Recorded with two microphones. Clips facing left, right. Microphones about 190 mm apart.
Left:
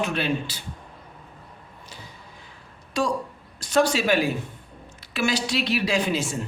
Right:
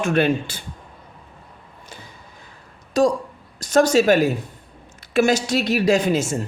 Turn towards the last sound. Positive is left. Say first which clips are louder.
# right 6 dB
turn(degrees=-45)  # may be behind; listen again after turning